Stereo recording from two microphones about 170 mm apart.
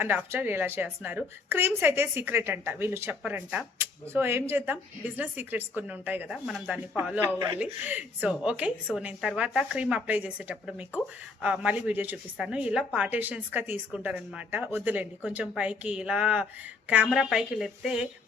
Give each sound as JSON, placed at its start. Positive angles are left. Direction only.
{"t": 0.0, "sound": "a woman's voice", "side_deg": -10}
{"t": 7.3, "sound": "speech", "side_deg": -25}
{"t": 7.6, "sound": "a woman's voice", "side_deg": -10}